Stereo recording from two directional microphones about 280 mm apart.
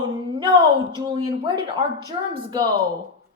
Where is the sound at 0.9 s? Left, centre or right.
Centre.